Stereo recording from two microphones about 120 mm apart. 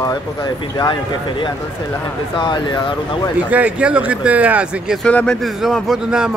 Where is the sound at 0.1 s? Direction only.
35° left (ahead or behind).